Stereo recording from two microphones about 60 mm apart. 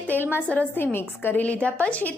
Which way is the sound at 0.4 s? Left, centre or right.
Left.